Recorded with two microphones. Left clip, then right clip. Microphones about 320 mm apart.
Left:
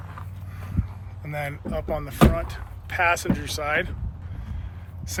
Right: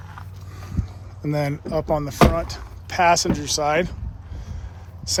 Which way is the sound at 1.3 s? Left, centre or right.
Centre.